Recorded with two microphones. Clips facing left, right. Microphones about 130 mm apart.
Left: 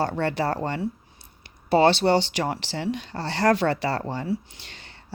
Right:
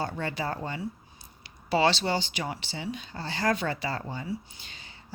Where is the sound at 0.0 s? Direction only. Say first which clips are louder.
Left 7 dB; 70° left (ahead or behind).